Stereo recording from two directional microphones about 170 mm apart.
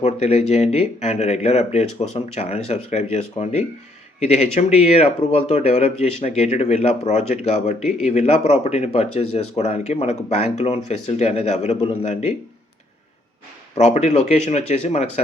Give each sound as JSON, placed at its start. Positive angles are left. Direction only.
{"t": 0.0, "sound": "speech", "side_deg": 40}
{"t": 13.7, "sound": "speech", "side_deg": 40}